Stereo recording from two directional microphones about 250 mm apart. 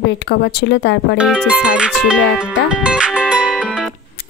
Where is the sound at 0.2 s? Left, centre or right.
Left.